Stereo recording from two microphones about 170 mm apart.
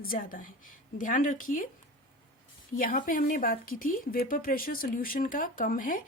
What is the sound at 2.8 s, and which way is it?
Speech, 55° left (ahead or behind).